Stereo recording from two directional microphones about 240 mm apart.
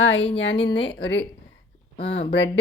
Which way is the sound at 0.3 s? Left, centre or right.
Left.